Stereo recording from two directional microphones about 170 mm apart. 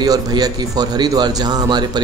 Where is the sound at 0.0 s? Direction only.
25° right (ahead or behind).